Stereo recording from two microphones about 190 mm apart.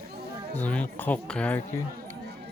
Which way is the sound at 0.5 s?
10° left (ahead or behind).